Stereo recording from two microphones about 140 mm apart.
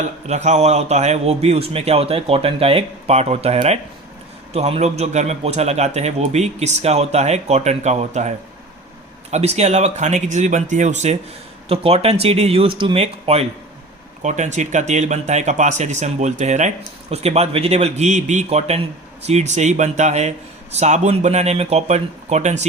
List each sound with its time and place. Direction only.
0.0 s a man's voice: 55° right (ahead or behind)
9.3 s a man's voice: 50° right (ahead or behind)
14.2 s a man's voice: 55° right (ahead or behind)